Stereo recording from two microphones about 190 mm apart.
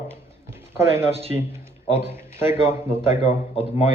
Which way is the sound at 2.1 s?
15° right (ahead or behind).